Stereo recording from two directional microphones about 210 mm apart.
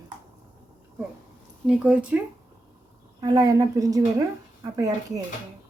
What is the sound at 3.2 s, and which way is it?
A woman's voice, 15° right (ahead or behind).